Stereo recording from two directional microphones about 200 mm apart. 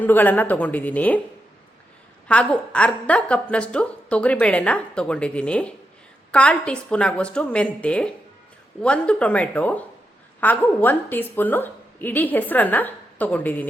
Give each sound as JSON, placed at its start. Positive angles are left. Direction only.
{"t": 0.0, "sound": "a woman's voice", "side_deg": 10}
{"t": 2.2, "sound": "a woman's voice", "side_deg": 5}